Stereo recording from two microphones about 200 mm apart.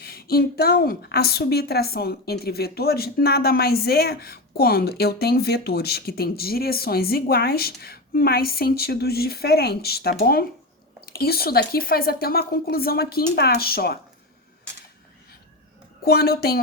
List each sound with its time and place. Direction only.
0.0 s a woman's voice: 50° left (ahead or behind)
16.0 s a woman's voice: 50° left (ahead or behind)